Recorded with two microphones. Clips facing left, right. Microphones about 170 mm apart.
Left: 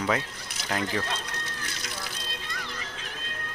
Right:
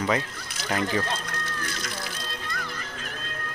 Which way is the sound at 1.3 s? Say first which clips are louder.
Right 4 dB; 55° right (ahead or behind).